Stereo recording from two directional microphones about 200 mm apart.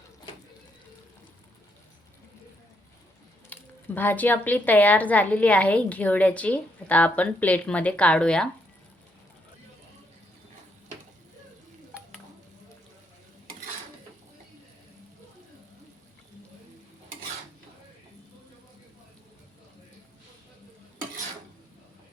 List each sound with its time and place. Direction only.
3.5 s speech: 10° left (ahead or behind)